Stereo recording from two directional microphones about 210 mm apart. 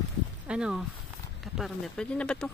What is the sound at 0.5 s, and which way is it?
Speech, 5° right (ahead or behind).